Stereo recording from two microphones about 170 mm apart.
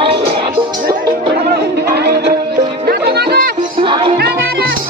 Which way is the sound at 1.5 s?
65° right (ahead or behind).